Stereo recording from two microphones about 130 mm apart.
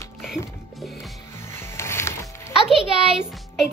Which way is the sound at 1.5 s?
20° left (ahead or behind).